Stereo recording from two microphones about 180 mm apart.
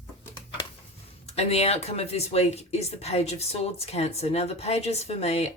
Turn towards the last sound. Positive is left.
turn(degrees=35)  # may be behind; listen again after turning